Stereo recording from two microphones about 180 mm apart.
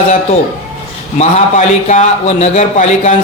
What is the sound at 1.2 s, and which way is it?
A man's voice, 40° left (ahead or behind).